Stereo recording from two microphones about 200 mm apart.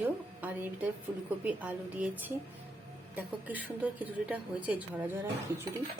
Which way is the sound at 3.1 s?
10° right (ahead or behind).